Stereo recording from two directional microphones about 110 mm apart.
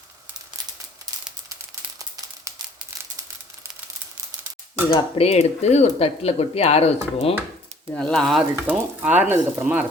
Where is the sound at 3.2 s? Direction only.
35° right (ahead or behind).